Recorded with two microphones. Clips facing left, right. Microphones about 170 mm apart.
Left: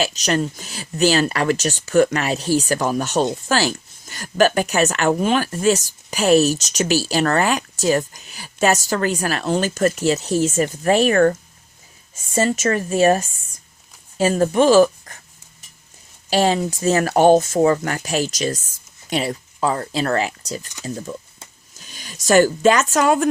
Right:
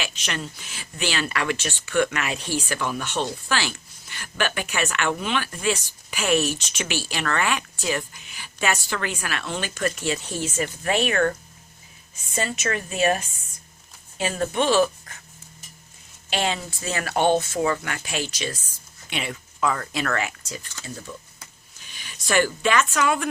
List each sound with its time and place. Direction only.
0.0 s speech: 40° left (ahead or behind)
16.3 s speech: 40° left (ahead or behind)